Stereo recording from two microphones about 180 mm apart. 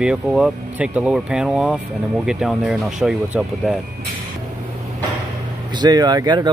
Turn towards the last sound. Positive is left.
turn(degrees=-25)  # may be behind; listen again after turning